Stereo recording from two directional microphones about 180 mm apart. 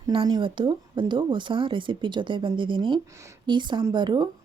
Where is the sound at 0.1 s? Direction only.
25° right (ahead or behind).